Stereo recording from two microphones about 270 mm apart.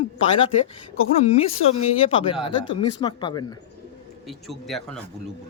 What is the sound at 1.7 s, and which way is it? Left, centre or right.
Speech, left.